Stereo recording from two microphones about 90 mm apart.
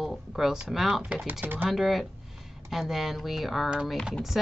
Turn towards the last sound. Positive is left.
turn(degrees=-5)  # may be behind; listen again after turning